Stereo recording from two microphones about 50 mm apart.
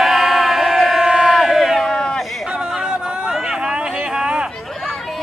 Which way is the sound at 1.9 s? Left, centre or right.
Centre.